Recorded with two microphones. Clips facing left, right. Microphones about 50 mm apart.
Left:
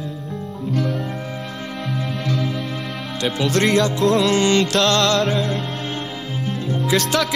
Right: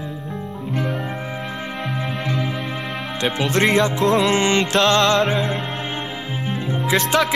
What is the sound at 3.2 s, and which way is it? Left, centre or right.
Music, right.